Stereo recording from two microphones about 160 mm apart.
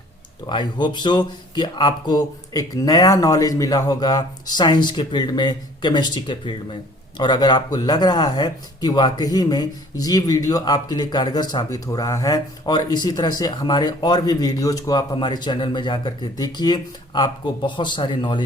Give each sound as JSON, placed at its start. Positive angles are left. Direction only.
{"t": 0.4, "sound": "speech", "side_deg": 30}